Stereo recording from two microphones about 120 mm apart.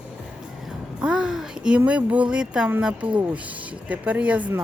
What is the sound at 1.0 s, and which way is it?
A child's voice, 5° right (ahead or behind).